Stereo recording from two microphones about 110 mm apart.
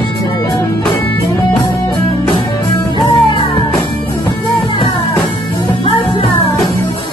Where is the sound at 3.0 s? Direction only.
45° left (ahead or behind).